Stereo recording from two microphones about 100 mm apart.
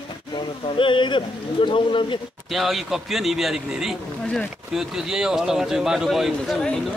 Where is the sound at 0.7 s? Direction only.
55° left (ahead or behind).